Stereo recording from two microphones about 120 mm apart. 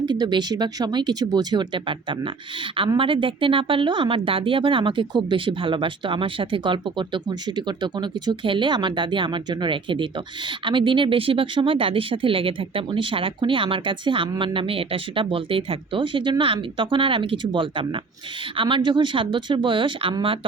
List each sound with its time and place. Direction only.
0.0 s speech: 40° right (ahead or behind)